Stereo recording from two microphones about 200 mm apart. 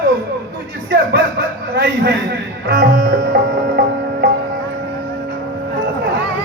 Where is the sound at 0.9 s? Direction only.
55° right (ahead or behind).